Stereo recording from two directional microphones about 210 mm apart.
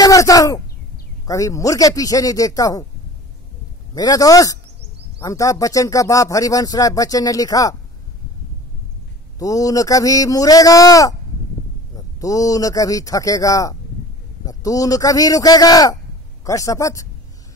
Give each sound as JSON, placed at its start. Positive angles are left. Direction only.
{"t": 0.0, "sound": "a sound", "side_deg": 15}
{"t": 1.2, "sound": "speech", "side_deg": 15}
{"t": 3.9, "sound": "speech", "side_deg": 20}
{"t": 9.4, "sound": "speech", "side_deg": 15}
{"t": 12.2, "sound": "speech", "side_deg": 15}